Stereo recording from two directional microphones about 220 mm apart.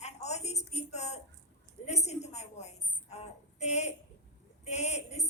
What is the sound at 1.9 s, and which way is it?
A woman's voice, 30° left (ahead or behind).